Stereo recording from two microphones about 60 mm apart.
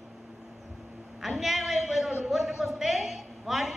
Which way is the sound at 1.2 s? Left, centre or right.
Centre.